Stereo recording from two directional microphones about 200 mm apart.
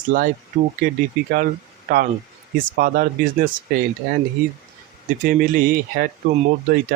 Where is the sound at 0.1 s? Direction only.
45° right (ahead or behind).